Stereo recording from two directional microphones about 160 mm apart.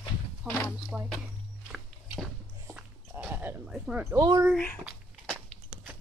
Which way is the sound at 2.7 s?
10° right (ahead or behind).